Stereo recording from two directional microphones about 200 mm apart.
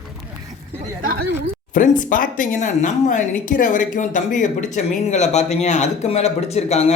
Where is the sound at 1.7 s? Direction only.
40° left (ahead or behind).